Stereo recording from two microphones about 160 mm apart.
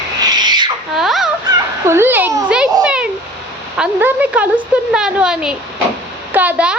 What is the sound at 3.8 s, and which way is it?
Speech, 10° right (ahead or behind).